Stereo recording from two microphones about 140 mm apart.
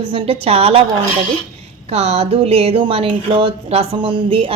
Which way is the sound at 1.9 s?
50° right (ahead or behind).